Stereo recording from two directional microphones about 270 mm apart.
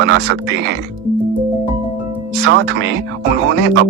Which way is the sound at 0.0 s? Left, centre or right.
Right.